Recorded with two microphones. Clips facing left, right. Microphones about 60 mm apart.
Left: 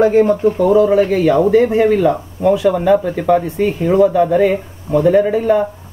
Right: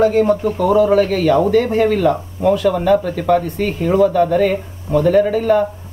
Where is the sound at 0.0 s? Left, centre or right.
Left.